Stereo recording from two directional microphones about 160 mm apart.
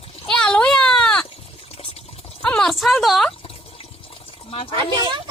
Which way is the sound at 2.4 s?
5° left (ahead or behind).